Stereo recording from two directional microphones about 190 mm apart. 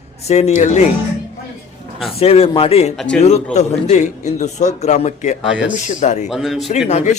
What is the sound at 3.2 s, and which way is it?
A man's voice, 35° left (ahead or behind).